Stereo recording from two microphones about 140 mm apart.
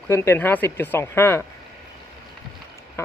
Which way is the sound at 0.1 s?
15° left (ahead or behind).